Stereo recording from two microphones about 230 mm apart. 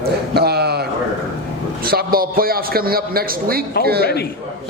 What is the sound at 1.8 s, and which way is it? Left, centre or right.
A man's voice, right.